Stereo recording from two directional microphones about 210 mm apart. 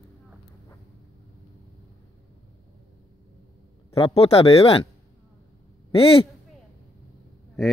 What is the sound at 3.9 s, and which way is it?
Speech, 30° left (ahead or behind).